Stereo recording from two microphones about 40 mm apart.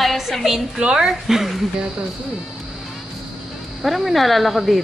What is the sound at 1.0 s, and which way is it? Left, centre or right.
Speech, centre.